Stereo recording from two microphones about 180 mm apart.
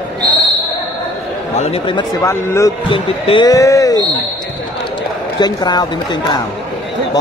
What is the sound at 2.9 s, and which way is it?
A man's voice, 30° left (ahead or behind).